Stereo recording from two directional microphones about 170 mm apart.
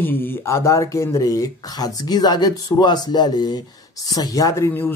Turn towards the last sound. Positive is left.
turn(degrees=15)  # may be behind; listen again after turning